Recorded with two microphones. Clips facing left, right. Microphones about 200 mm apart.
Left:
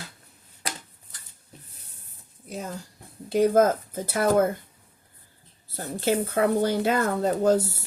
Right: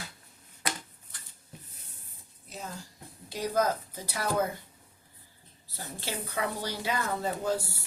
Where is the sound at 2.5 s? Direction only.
50° left (ahead or behind).